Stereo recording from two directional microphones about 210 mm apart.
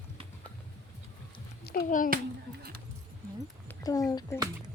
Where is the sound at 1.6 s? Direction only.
45° left (ahead or behind).